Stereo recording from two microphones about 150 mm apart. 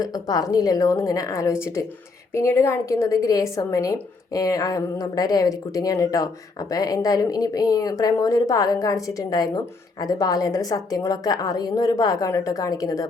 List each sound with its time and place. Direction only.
0.0 s a woman's voice: 25° left (ahead or behind)